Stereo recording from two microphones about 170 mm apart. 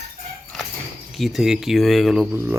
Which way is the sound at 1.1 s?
Centre (ahead or behind).